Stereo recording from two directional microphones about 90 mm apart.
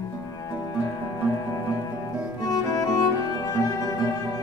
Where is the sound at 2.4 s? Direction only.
45° left (ahead or behind).